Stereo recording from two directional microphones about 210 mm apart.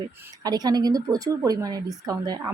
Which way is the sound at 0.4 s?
20° right (ahead or behind).